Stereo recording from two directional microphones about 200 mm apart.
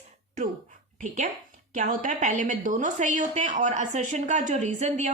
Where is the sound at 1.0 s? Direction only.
40° right (ahead or behind).